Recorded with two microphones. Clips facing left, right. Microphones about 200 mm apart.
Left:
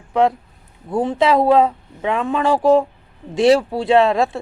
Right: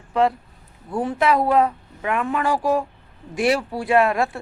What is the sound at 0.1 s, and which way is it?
Speech, 20° left (ahead or behind).